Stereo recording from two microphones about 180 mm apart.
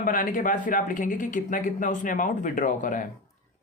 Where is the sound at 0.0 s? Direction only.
50° left (ahead or behind).